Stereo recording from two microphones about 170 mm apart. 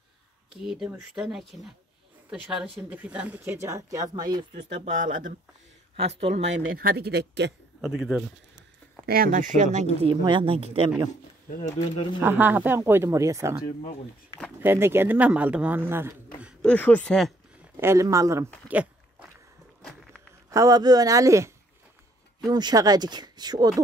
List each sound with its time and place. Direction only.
0.5 s speech: 5° right (ahead or behind); by 4.6 s 25° right (ahead or behind)
4.8 s speech: 50° right (ahead or behind)
6.0 s speech: 35° right (ahead or behind)
6.7 s speech: 60° right (ahead or behind); by 7.5 s 80° right
7.8 s speech: 5° right (ahead or behind)
9.0 s speech: 60° right (ahead or behind)
10.0 s speech: 30° right (ahead or behind)
12.2 s speech: 10° right (ahead or behind)
14.6 s speech: 15° right (ahead or behind)
16.6 s speech: 10° left (ahead or behind)
17.7 s speech: 15° right (ahead or behind)
18.7 s a sound: 10° right (ahead or behind)
20.4 s speech: 20° right (ahead or behind)
22.5 s speech: 25° right (ahead or behind)